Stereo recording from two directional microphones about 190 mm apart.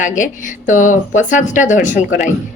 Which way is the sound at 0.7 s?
40° left (ahead or behind).